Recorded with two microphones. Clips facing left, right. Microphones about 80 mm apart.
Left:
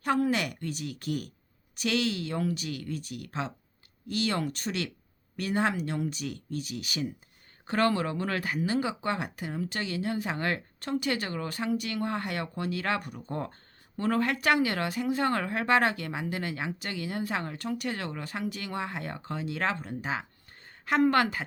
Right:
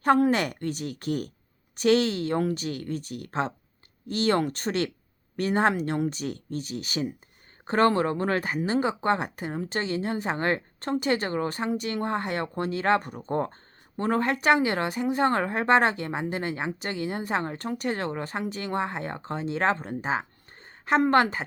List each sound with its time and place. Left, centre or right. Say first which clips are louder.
0.0 s speech: right 6 dB; right